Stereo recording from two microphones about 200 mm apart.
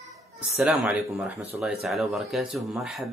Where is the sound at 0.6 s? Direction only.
Centre (ahead or behind).